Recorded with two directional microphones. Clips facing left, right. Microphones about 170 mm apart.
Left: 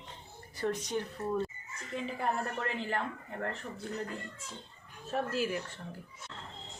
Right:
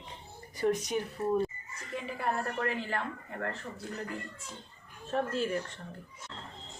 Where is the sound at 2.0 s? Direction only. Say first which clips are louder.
Right 1 dB; 20° left (ahead or behind).